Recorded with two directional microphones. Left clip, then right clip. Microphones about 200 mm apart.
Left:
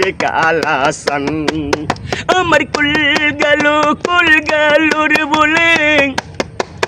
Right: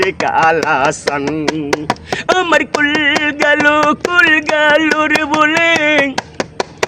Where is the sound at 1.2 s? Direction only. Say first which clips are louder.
Even; centre (ahead or behind).